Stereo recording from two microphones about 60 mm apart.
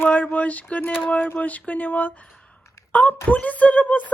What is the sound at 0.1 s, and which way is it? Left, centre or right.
Speech, left.